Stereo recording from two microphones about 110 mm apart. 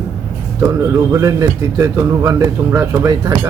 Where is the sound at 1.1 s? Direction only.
30° right (ahead or behind).